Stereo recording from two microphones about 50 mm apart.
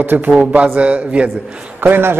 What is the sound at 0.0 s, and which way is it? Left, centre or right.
Speech, right.